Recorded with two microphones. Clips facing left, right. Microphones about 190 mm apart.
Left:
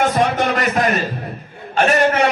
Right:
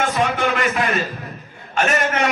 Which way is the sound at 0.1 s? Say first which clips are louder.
Left 3 dB; 40° left (ahead or behind).